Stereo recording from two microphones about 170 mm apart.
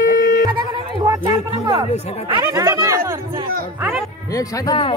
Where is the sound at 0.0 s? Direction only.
55° left (ahead or behind).